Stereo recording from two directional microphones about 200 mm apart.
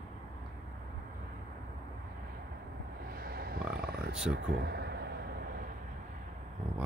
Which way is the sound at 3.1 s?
50° right (ahead or behind).